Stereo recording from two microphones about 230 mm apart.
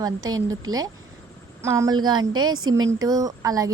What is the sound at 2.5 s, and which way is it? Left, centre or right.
Speech, right.